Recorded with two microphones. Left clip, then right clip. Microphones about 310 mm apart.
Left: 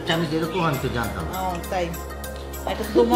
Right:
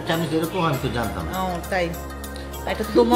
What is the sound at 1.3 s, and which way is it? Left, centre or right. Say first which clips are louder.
Speech: right 2 dB; centre.